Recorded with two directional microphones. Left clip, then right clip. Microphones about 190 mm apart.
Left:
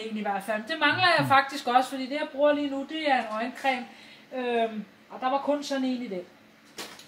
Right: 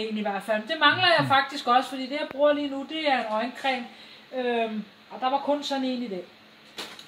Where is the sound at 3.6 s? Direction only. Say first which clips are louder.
Left 1 dB; 5° left (ahead or behind).